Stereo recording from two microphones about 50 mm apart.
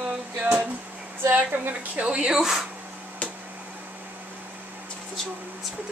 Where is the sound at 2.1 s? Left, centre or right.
Centre.